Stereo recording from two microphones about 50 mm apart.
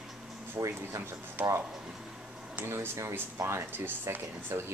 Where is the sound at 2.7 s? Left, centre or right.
Right.